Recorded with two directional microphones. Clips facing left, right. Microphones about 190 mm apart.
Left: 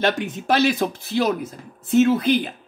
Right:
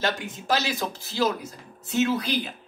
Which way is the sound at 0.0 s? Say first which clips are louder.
Left 6 dB; 60° left (ahead or behind).